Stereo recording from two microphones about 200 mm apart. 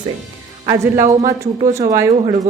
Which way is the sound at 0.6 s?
15° right (ahead or behind).